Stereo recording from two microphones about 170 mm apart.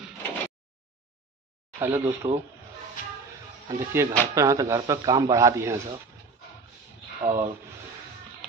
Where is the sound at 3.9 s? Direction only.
15° right (ahead or behind).